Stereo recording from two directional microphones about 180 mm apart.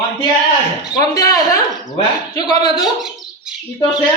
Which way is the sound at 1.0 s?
20° left (ahead or behind).